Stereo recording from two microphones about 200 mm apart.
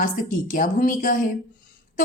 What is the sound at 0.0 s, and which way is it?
A woman's voice, 40° left (ahead or behind).